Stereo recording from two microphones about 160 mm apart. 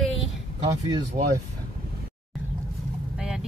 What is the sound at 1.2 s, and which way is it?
Speech, 60° right (ahead or behind).